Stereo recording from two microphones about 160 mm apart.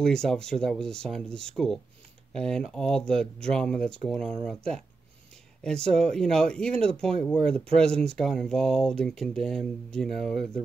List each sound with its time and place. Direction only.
0.0 s speech: 5° left (ahead or behind)